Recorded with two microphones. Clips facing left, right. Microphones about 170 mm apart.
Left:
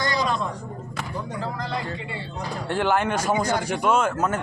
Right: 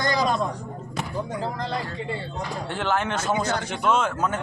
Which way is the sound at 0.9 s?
25° right (ahead or behind).